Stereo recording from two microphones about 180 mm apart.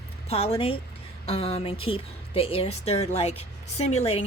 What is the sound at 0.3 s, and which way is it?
A woman's voice, 35° left (ahead or behind).